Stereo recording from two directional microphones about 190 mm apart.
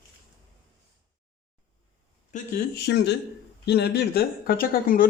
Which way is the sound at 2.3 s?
55° left (ahead or behind).